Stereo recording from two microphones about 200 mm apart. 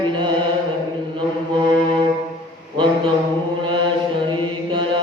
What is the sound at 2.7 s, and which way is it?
Mantra, 25° right (ahead or behind).